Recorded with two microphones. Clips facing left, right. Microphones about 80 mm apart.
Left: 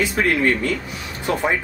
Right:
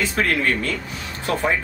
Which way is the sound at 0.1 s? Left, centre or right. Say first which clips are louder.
Left 2 dB; centre.